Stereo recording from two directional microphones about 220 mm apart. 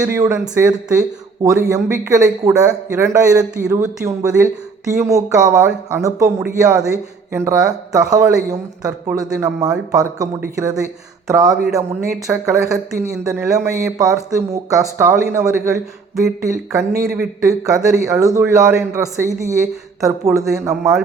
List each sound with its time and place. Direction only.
0.0 s speech: 10° right (ahead or behind)
11.5 s speech: centre (ahead or behind)
11.8 s speech: 10° right (ahead or behind)
20.5 s speech: centre (ahead or behind)